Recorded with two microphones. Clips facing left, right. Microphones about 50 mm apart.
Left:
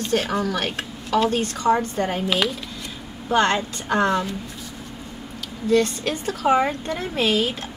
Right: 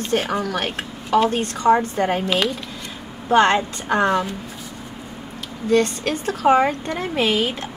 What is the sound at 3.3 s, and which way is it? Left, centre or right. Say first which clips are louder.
Speech: right 4 dB; right.